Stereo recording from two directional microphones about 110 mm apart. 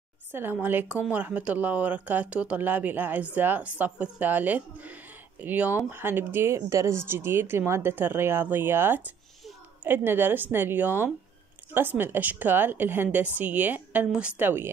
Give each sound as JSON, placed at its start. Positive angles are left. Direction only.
{"t": 0.3, "sound": "a woman's voice", "side_deg": -20}